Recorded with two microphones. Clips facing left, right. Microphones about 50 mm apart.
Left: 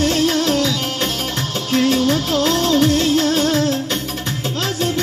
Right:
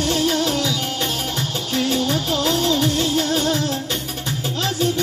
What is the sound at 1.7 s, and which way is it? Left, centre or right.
Music, left.